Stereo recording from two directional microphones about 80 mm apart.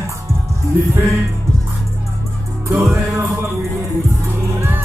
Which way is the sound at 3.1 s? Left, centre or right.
Right.